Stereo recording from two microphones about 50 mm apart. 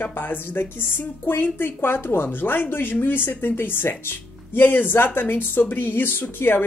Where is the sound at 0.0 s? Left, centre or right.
Left.